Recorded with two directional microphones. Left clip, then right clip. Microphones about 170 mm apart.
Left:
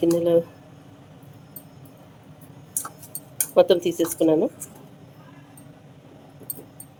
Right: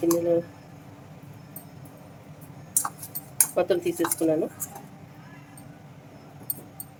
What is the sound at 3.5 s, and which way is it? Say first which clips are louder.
Speech: left 7 dB; 45° left (ahead or behind).